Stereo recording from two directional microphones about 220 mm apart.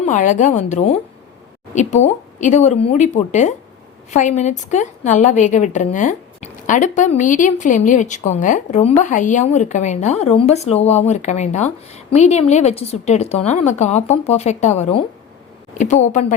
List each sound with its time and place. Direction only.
0.0 s a woman's voice: 35° left (ahead or behind)